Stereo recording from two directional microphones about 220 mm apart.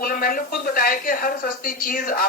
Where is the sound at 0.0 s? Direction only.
40° left (ahead or behind).